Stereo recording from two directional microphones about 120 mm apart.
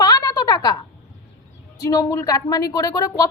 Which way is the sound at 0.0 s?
35° left (ahead or behind).